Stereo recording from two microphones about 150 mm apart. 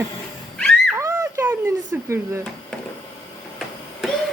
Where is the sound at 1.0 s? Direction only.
20° right (ahead or behind).